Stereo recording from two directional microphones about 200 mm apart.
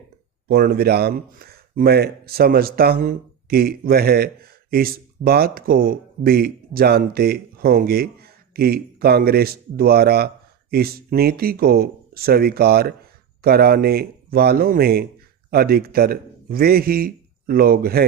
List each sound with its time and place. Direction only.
0.4 s a man's voice: 50° right (ahead or behind)